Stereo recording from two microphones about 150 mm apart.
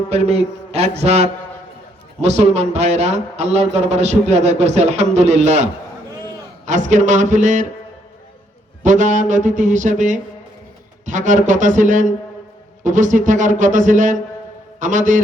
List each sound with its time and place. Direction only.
0.1 s a man's voice: 45° right (ahead or behind)
6.7 s a man's voice: 55° right (ahead or behind)
8.8 s a man's voice: 55° right (ahead or behind)